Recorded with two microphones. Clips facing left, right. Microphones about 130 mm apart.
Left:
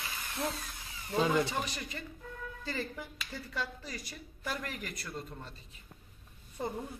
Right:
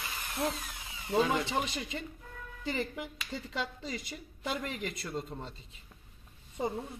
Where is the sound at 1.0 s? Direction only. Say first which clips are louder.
Even; 20° right (ahead or behind).